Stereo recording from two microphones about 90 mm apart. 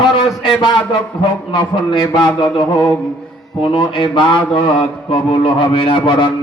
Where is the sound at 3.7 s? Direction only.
65° left (ahead or behind).